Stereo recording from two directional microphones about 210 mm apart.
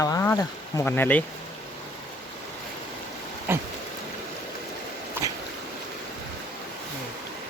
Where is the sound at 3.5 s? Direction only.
10° right (ahead or behind).